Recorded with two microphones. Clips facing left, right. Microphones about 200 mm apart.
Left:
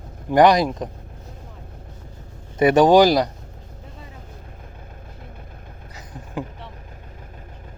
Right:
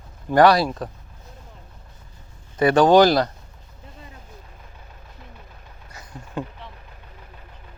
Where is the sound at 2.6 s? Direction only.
20° left (ahead or behind).